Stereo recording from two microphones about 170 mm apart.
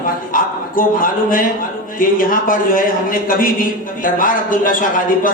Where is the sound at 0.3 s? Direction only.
55° left (ahead or behind).